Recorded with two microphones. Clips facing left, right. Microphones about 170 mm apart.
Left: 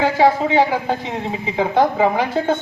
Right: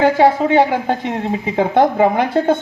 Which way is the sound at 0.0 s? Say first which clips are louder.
Right 3 dB; 55° right (ahead or behind).